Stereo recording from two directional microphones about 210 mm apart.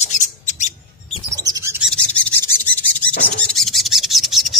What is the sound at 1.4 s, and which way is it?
Bird, 15° right (ahead or behind).